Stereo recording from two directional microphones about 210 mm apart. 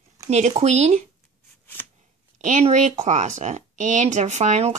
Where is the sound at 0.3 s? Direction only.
35° right (ahead or behind).